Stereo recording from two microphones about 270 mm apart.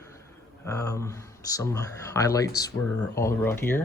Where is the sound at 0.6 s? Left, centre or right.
Centre.